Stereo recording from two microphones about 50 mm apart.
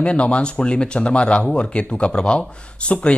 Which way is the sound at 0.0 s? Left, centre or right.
Left.